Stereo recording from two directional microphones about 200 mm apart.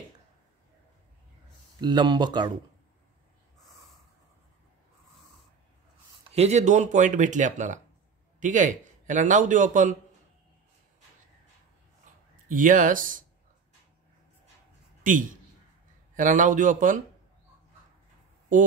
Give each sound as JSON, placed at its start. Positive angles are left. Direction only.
{"t": 1.8, "sound": "speech", "side_deg": -20}
{"t": 6.3, "sound": "a man's voice", "side_deg": -35}
{"t": 12.4, "sound": "a man's voice", "side_deg": -40}
{"t": 15.0, "sound": "a man's voice", "side_deg": -40}